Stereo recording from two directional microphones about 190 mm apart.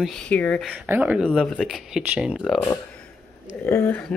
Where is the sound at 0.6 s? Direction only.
10° right (ahead or behind).